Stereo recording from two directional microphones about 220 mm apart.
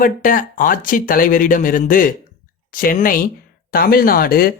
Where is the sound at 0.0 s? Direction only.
35° left (ahead or behind).